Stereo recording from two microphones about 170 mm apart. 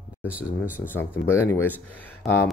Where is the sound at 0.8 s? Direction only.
10° left (ahead or behind).